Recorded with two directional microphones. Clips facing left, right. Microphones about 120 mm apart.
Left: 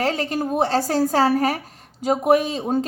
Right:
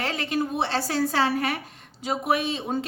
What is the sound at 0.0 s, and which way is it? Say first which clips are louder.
A woman's voice: left 4 dB; 40° left (ahead or behind).